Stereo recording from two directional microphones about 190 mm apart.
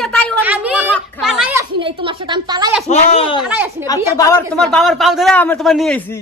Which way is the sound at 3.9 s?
15° left (ahead or behind).